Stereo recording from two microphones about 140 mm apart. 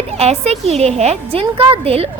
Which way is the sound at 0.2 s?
50° right (ahead or behind).